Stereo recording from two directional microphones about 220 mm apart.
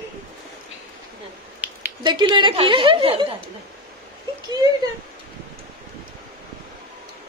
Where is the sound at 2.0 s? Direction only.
20° right (ahead or behind).